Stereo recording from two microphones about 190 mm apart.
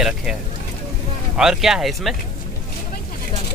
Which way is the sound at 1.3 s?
5° right (ahead or behind).